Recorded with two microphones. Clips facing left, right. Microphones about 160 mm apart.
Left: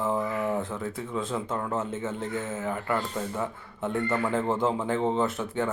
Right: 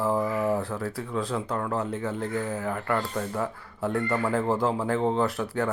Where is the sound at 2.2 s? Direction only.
35° right (ahead or behind).